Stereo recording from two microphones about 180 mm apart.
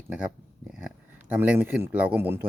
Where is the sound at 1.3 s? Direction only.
10° right (ahead or behind).